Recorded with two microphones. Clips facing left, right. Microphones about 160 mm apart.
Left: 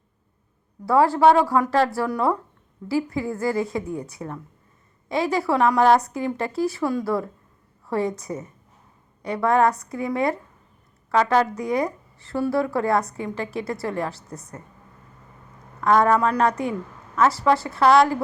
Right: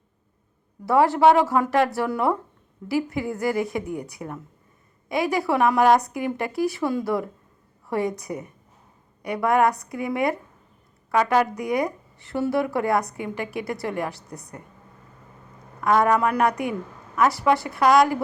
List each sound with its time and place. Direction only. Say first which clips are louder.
0.9 s a woman's voice: even; 20° right (ahead or behind)
15.8 s a woman's voice: left 1 dB; 15° right (ahead or behind)